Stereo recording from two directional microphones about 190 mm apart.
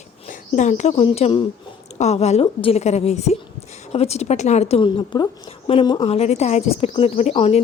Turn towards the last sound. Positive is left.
turn(degrees=35)  # may be behind; listen again after turning